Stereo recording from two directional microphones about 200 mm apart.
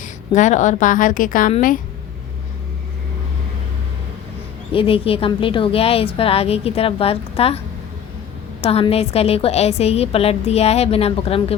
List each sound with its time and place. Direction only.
0.0 s a woman's voice: 40° left (ahead or behind)
4.7 s a woman's voice: 25° left (ahead or behind)
8.6 s a woman's voice: 30° left (ahead or behind)